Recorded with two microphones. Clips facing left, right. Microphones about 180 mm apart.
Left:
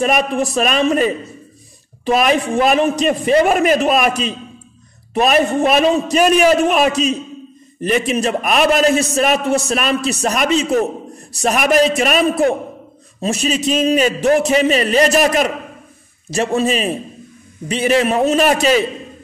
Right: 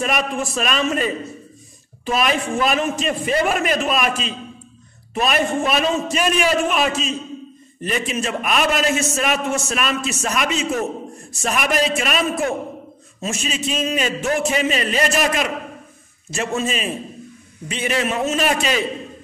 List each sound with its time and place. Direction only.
0.0 s a man's voice: 40° left (ahead or behind)
2.0 s a man's voice: 40° left (ahead or behind)